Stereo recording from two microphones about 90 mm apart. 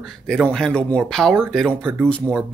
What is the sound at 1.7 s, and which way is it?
Speech, 20° right (ahead or behind).